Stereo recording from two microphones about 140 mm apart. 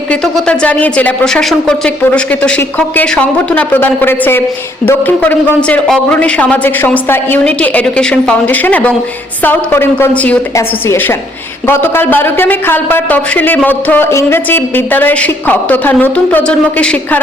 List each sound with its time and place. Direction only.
0.3 s speech: 10° left (ahead or behind)